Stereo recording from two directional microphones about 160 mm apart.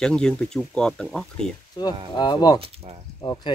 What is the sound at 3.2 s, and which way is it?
Speech, 25° left (ahead or behind).